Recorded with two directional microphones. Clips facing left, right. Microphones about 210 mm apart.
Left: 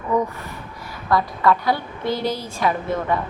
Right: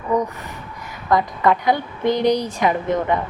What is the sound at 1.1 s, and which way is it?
A woman's voice, 20° right (ahead or behind).